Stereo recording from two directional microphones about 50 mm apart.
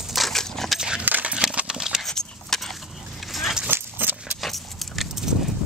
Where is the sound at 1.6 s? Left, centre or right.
Centre.